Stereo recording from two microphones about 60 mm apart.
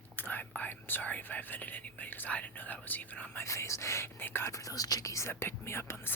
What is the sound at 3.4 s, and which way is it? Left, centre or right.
Speech, left.